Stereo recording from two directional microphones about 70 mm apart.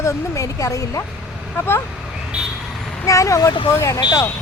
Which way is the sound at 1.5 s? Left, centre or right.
Left.